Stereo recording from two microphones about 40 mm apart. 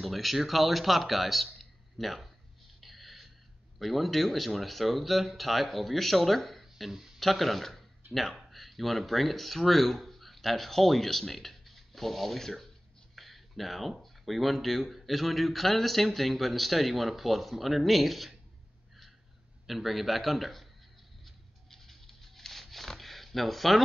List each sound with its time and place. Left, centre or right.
0.0 s speech: centre
2.8 s gasp: centre
3.8 s speech: centre
19.6 s speech: centre
21.6 s zipper: centre